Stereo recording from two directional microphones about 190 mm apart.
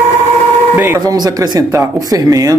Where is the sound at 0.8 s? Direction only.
15° right (ahead or behind).